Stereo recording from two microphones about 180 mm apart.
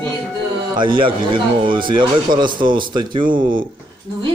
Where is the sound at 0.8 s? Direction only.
25° right (ahead or behind).